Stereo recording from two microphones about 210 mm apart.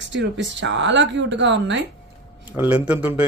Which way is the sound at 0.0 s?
60° right (ahead or behind).